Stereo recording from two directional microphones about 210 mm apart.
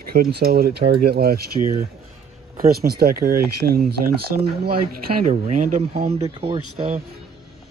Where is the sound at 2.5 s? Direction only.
45° right (ahead or behind).